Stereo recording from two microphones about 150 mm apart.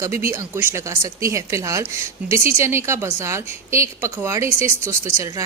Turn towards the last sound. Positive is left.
turn(degrees=-20)  # may be behind; listen again after turning